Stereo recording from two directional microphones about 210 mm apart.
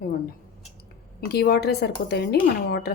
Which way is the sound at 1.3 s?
50° left (ahead or behind).